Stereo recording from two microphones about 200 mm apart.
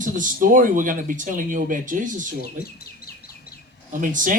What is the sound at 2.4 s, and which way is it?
Bird, 50° left (ahead or behind).